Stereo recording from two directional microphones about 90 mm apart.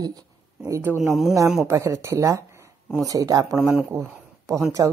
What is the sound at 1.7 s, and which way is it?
Speech, 35° right (ahead or behind).